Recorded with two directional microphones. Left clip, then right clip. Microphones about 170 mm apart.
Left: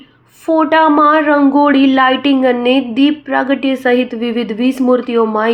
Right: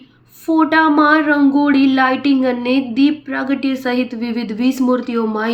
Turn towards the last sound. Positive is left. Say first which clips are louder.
# left 6 dB
turn(degrees=0)  # may be behind; listen again after turning